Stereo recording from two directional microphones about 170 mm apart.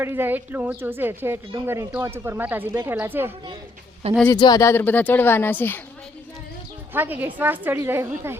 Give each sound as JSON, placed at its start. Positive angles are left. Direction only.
{"t": 0.0, "sound": "speech", "side_deg": -15}
{"t": 4.0, "sound": "speech", "side_deg": -40}
{"t": 4.4, "sound": "speech", "side_deg": 25}
{"t": 6.9, "sound": "speech", "side_deg": -10}